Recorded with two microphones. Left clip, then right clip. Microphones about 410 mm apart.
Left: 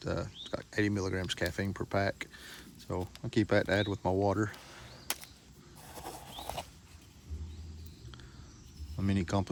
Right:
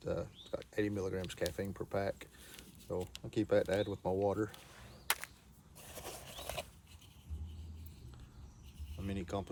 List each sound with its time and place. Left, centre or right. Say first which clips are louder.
0.0 s speech: left 3 dB; centre
5.9 s a sound: left 3 dB; centre
9.0 s speech: left 7 dB; centre